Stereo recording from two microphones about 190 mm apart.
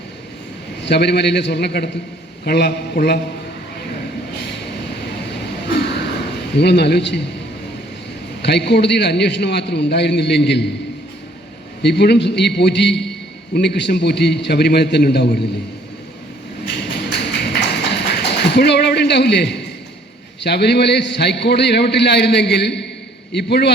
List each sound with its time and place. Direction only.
0.9 s a man's voice: 60° left (ahead or behind)
6.5 s a man's voice: 60° left (ahead or behind)
8.4 s a man's voice: 60° left (ahead or behind)
11.8 s a man's voice: 60° left (ahead or behind)
17.0 s tap: 60° left (ahead or behind)
20.4 s a man's voice: 60° left (ahead or behind)